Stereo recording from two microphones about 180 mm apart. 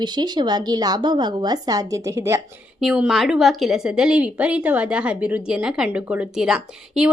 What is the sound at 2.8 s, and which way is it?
A woman's voice, 5° right (ahead or behind).